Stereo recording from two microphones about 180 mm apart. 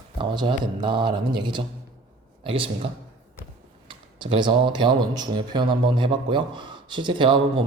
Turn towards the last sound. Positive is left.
turn(degrees=-25)  # may be behind; listen again after turning